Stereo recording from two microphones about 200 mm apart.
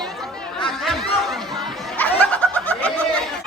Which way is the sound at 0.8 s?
Centre (ahead or behind).